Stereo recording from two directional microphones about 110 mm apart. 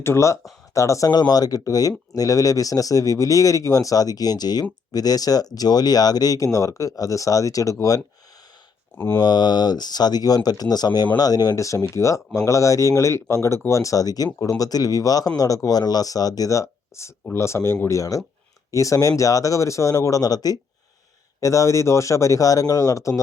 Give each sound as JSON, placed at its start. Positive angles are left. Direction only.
{"t": 0.0, "sound": "speech", "side_deg": 25}
{"t": 9.0, "sound": "speech", "side_deg": 20}
{"t": 9.2, "sound": "speech", "side_deg": 40}